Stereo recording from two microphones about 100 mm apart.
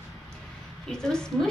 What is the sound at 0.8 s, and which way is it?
Speech, 5° left (ahead or behind).